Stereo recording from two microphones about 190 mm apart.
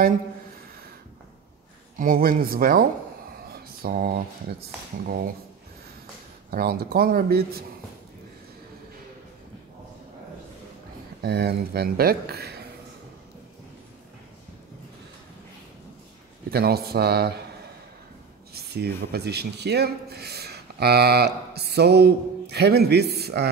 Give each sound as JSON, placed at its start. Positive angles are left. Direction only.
{"t": 2.0, "sound": "speech", "side_deg": -50}
{"t": 6.5, "sound": "speech", "side_deg": -55}
{"t": 11.2, "sound": "a man's voice", "side_deg": -55}
{"t": 16.4, "sound": "a man's voice", "side_deg": -55}
{"t": 18.5, "sound": "a man's voice", "side_deg": -60}